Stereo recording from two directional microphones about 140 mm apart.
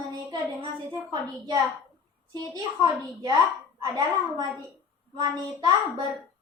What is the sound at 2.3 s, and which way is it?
A woman's voice, 30° right (ahead or behind).